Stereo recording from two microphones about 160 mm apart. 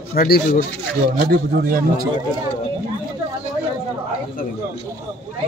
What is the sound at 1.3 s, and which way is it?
Speech, 65° right (ahead or behind).